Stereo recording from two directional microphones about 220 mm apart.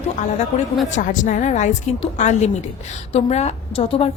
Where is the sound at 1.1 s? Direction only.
35° left (ahead or behind).